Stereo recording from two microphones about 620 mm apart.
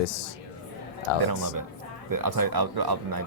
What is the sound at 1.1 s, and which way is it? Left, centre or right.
Speech, left.